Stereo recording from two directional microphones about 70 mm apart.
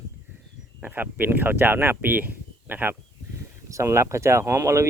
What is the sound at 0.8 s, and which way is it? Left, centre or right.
Speech, right.